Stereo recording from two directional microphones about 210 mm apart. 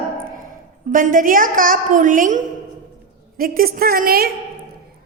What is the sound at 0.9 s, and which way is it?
A woman's voice, 40° right (ahead or behind).